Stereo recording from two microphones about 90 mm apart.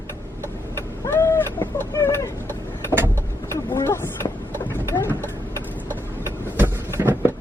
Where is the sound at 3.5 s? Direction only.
30° left (ahead or behind).